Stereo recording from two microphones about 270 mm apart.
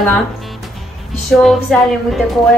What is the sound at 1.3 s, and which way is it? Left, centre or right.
Speech, centre.